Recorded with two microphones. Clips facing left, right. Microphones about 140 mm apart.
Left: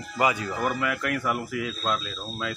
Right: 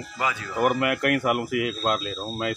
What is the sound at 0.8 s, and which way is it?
Speech, 60° right (ahead or behind).